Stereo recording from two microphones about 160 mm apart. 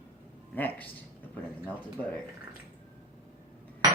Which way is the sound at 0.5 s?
10° left (ahead or behind).